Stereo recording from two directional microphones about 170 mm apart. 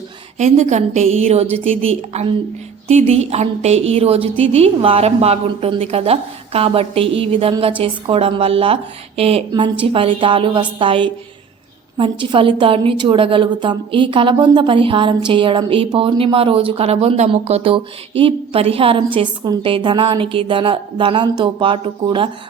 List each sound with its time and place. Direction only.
0.3 s a woman's voice: 40° right (ahead or behind)